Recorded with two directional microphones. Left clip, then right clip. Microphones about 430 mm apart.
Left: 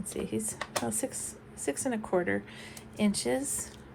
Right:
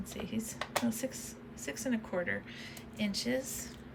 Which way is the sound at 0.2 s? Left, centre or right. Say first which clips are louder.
Left 5 dB; centre.